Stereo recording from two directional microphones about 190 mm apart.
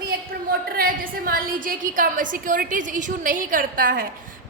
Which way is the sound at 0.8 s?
50° right (ahead or behind).